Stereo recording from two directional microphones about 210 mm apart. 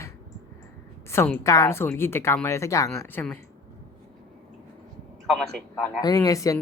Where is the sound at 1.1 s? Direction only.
10° left (ahead or behind).